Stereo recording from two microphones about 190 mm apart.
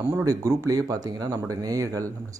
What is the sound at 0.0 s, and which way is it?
Speech, 15° right (ahead or behind).